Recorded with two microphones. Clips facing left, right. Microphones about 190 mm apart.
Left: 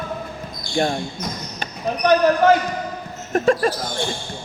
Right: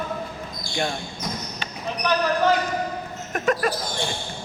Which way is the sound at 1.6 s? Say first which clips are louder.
Left 8 dB; 50° left (ahead or behind).